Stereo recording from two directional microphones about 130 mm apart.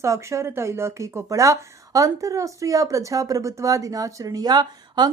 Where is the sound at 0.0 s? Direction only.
20° right (ahead or behind).